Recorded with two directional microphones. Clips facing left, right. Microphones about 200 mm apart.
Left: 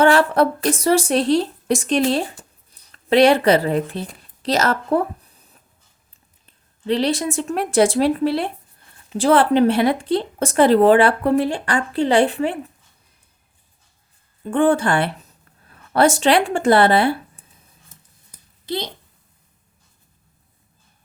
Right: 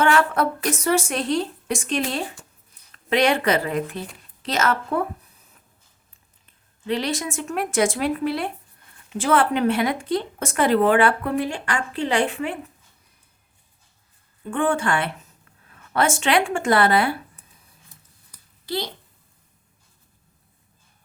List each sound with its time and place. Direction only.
0.0 s a woman's voice: 35° left (ahead or behind)
6.4 s speech: 30° left (ahead or behind)
14.5 s speech: 35° left (ahead or behind)
18.3 s a sound: 20° left (ahead or behind)